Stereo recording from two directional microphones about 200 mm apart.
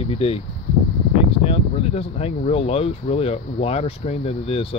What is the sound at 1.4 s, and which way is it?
Speech, 30° left (ahead or behind).